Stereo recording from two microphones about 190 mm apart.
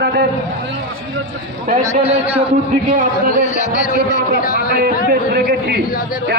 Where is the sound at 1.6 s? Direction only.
40° right (ahead or behind).